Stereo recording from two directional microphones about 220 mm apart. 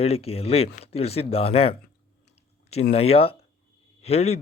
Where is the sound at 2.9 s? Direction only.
25° left (ahead or behind).